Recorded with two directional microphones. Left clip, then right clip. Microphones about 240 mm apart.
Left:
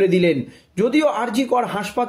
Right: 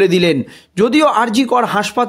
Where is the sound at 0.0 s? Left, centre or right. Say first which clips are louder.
Right 4 dB; right.